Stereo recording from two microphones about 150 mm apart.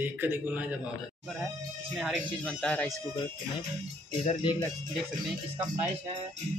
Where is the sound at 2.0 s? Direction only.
Centre (ahead or behind).